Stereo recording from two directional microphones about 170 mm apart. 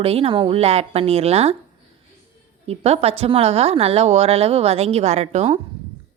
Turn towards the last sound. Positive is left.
turn(degrees=-40)  # may be behind; listen again after turning